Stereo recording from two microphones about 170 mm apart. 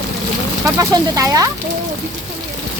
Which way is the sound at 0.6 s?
20° right (ahead or behind).